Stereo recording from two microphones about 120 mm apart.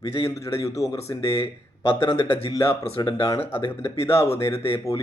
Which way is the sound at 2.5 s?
30° left (ahead or behind).